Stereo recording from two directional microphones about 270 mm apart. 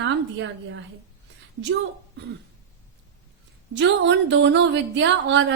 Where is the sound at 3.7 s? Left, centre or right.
Right.